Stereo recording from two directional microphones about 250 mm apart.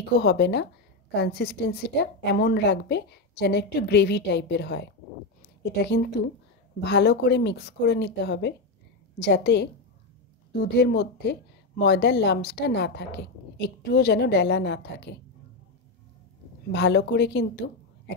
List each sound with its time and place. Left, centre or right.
0.1 s a woman's voice: left
16.7 s a woman's voice: left